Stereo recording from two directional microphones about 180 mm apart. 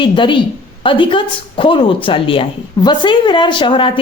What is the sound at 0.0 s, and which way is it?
A woman's voice, 25° left (ahead or behind).